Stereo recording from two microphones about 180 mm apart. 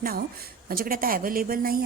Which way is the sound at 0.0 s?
55° right (ahead or behind).